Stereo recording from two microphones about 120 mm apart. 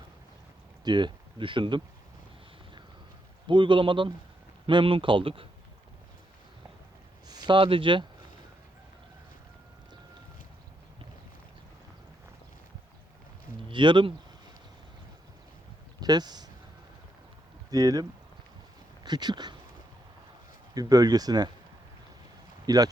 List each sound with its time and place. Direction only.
0.9 s speech: 40° right (ahead or behind)
3.4 s speech: 45° right (ahead or behind)
7.3 s speech: 35° right (ahead or behind)
13.7 s speech: 40° right (ahead or behind)
16.0 s speech: 35° right (ahead or behind)
17.7 s speech: 30° right (ahead or behind)
19.0 s speech: 35° right (ahead or behind)
20.7 s speech: 30° right (ahead or behind)
22.6 s speech: 30° right (ahead or behind)